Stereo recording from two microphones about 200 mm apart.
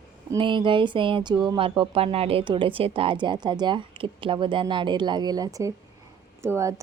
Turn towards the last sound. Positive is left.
turn(degrees=-15)  # may be behind; listen again after turning